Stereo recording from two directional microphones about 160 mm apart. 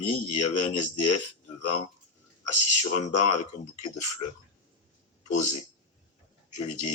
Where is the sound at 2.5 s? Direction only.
45° left (ahead or behind).